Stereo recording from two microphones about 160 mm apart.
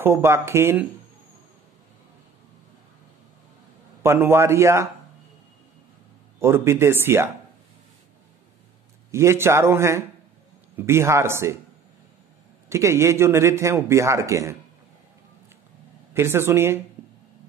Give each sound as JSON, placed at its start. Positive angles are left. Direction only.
{"t": 0.0, "sound": "a man's voice", "side_deg": -15}
{"t": 4.0, "sound": "a man's voice", "side_deg": -15}
{"t": 6.4, "sound": "a man's voice", "side_deg": -15}
{"t": 9.1, "sound": "a man's voice", "side_deg": -15}
{"t": 12.6, "sound": "a man's voice", "side_deg": -15}
{"t": 16.1, "sound": "a man's voice", "side_deg": -15}